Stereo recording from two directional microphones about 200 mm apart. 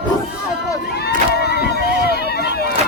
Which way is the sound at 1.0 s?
55° left (ahead or behind).